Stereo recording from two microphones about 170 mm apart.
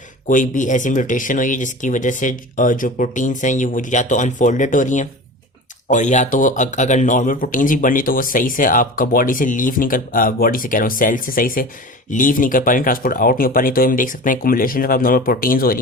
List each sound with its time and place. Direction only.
0.3 s speech: 50° left (ahead or behind)